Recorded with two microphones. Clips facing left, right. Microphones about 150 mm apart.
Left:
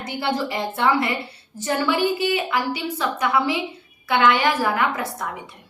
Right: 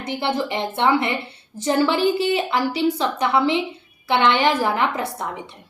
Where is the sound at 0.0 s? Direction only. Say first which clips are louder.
Right 1 dB; 25° right (ahead or behind).